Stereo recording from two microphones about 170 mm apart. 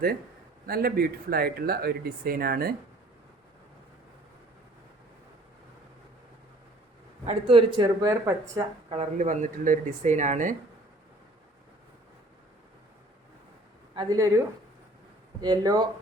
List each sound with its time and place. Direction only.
0.7 s speech: 60° right (ahead or behind)
7.3 s speech: 35° right (ahead or behind)
8.9 s speech: 40° right (ahead or behind)
13.9 s speech: 25° right (ahead or behind)